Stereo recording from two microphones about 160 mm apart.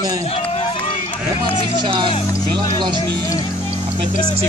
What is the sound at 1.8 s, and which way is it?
Speech, 30° right (ahead or behind).